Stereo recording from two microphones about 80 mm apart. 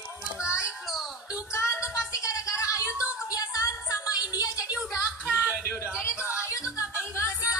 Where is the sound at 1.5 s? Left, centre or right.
Left.